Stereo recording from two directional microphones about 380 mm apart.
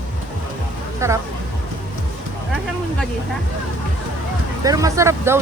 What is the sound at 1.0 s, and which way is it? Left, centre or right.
Speech, centre.